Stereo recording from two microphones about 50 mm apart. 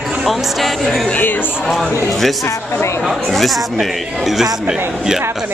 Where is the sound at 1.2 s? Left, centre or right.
Left.